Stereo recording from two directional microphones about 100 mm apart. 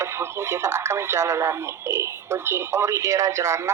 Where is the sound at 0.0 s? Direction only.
25° right (ahead or behind).